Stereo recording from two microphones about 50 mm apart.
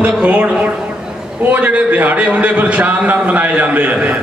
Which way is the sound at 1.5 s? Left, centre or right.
Right.